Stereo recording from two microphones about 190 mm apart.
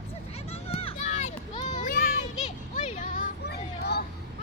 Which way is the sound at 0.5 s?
30° left (ahead or behind).